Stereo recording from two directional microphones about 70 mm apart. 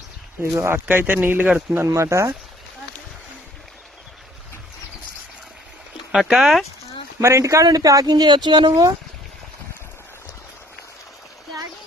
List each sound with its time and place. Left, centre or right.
0.6 s speech: right
1.9 s speech: right
6.1 s speech: centre
7.2 s speech: right